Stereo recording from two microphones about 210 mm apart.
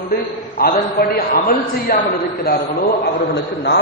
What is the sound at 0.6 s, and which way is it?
Speech, 45° left (ahead or behind).